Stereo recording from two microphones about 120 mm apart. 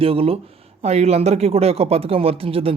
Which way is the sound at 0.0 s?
55° right (ahead or behind).